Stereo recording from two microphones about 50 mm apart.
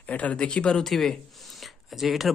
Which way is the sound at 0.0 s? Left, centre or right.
Left.